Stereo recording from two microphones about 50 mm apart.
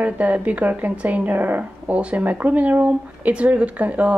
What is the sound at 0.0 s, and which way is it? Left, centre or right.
Speech, right.